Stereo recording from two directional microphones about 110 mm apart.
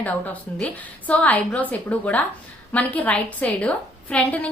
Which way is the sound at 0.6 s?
10° left (ahead or behind).